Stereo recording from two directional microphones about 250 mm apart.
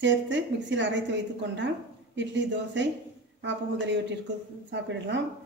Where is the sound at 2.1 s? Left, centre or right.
Right.